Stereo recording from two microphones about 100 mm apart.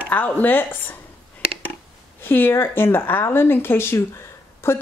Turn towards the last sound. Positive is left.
turn(degrees=25)  # may be behind; listen again after turning